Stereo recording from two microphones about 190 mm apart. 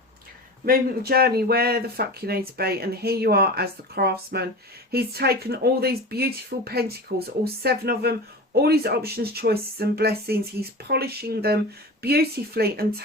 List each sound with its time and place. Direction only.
0.6 s speech: 50° right (ahead or behind)